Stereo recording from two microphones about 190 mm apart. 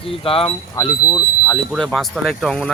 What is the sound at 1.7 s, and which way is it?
Speech, centre (ahead or behind).